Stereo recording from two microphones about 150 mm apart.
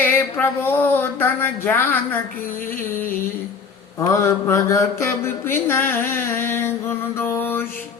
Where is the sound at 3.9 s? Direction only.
20° left (ahead or behind).